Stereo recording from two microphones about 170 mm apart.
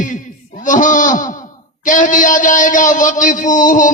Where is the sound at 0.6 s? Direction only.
50° left (ahead or behind).